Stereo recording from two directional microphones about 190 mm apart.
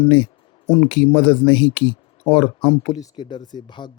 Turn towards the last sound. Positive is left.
turn(degrees=25)  # may be behind; listen again after turning